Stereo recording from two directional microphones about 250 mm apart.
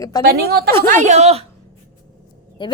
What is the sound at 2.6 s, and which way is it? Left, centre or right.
Speech, centre.